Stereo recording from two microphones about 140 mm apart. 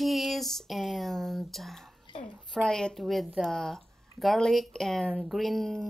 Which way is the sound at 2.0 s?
35° left (ahead or behind).